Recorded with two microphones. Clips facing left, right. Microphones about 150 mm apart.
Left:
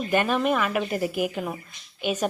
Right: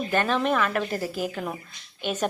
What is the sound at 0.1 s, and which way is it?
A woman's voice, 10° left (ahead or behind).